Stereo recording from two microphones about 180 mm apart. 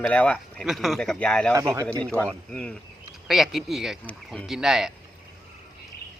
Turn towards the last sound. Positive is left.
turn(degrees=0)  # may be behind; listen again after turning